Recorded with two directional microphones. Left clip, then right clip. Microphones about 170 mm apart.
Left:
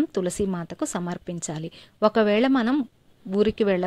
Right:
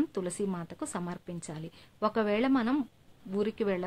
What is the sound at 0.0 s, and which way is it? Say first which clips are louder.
Speech: left 7 dB; 30° left (ahead or behind).